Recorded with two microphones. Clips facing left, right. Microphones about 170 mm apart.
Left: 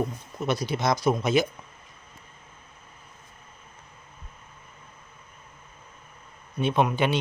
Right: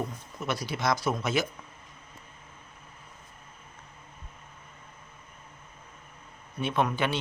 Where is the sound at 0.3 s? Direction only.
20° left (ahead or behind).